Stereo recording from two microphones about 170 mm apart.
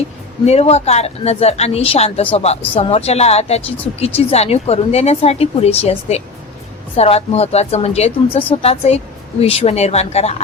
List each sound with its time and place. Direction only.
0.4 s a woman's voice: 40° left (ahead or behind)